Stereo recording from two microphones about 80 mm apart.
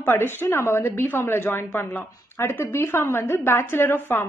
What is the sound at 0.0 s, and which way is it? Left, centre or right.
A woman's voice, left.